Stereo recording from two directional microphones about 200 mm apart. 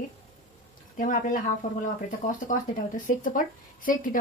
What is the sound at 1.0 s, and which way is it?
A woman's voice, 40° left (ahead or behind).